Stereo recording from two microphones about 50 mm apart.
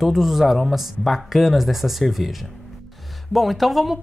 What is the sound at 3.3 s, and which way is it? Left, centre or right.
Speech, centre.